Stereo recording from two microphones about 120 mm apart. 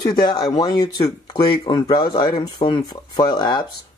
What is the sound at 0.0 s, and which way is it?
Speech, 35° left (ahead or behind).